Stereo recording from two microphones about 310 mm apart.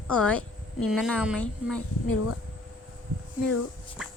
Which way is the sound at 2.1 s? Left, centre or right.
Left.